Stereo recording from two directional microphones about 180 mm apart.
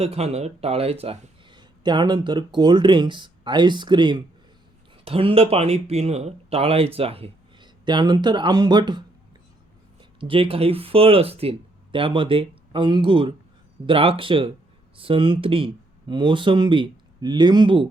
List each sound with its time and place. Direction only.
0.0 s speech: 35° right (ahead or behind)